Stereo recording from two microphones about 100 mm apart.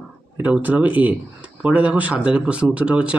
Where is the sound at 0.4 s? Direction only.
15° right (ahead or behind).